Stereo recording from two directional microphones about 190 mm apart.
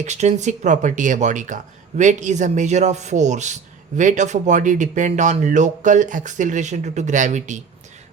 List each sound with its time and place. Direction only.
0.0 s speech: 35° right (ahead or behind)